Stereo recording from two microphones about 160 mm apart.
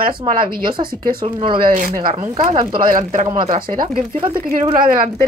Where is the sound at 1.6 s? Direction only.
55° right (ahead or behind).